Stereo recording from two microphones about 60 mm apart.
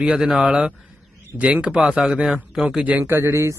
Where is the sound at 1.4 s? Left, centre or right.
Centre.